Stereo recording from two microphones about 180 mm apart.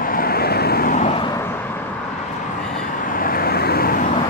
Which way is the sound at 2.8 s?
50° left (ahead or behind).